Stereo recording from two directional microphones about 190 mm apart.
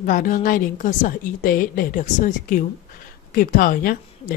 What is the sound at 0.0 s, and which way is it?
A woman's voice, 45° left (ahead or behind).